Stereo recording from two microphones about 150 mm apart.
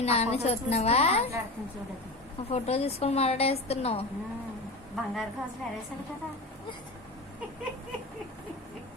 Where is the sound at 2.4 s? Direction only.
45° left (ahead or behind).